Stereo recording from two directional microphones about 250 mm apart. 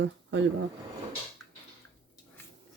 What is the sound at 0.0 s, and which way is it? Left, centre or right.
Speech, right.